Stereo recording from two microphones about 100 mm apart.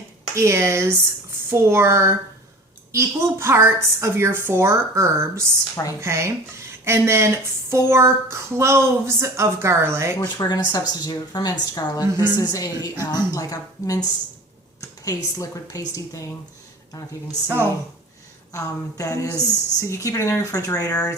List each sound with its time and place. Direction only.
0.3 s speech: 30° right (ahead or behind)
10.2 s speech: 45° left (ahead or behind)
18.5 s speech: 35° left (ahead or behind)